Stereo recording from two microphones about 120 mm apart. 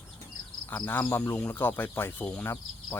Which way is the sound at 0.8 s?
15° left (ahead or behind).